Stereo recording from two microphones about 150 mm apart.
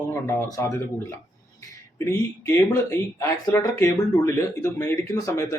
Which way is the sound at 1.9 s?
15° left (ahead or behind).